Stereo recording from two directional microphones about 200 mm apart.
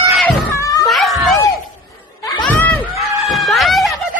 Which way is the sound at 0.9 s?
Centre (ahead or behind).